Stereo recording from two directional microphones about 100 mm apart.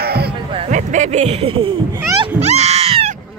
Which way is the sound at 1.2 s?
75° right (ahead or behind).